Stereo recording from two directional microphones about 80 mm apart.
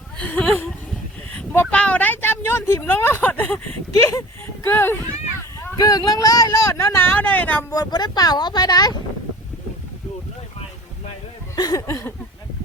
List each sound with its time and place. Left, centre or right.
0.2 s speech: centre
3.9 s speech: left
4.6 s speech: left
5.7 s speech: left
7.1 s speech: left
7.7 s speech: left
11.5 s a sound: left
11.8 s speech: left